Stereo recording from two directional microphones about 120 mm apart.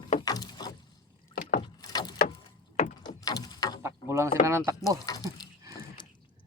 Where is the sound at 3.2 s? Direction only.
30° left (ahead or behind).